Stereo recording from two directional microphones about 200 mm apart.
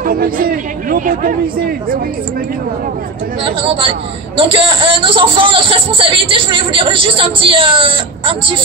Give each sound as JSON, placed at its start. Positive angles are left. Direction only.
{"t": 0.0, "sound": "speech", "side_deg": -45}
{"t": 3.4, "sound": "speech", "side_deg": -25}